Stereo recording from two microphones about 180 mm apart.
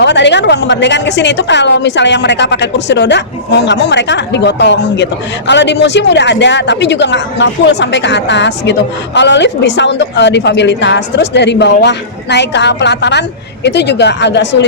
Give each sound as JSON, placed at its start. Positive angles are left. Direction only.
{"t": 0.0, "sound": "a woman's voice", "side_deg": 75}